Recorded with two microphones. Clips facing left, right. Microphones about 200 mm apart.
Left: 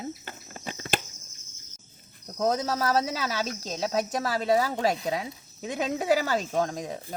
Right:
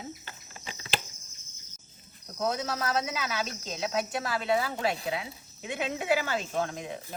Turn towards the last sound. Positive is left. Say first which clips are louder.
# left 4 dB
turn(degrees=40)  # may be behind; listen again after turning